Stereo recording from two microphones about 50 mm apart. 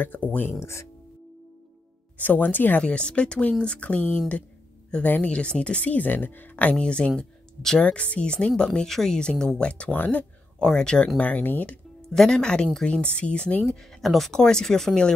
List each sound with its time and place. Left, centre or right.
0.3 s speech: left
2.1 s speech: left
2.8 s speech: centre
5.2 s speech: left
10.6 s speech: centre
11.1 s speech: left
12.1 s speech: centre
13.7 s speech: centre